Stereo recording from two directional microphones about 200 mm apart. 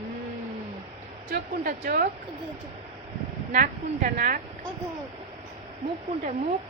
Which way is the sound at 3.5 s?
40° right (ahead or behind).